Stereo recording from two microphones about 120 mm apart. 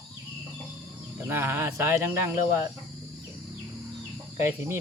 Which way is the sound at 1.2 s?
20° right (ahead or behind).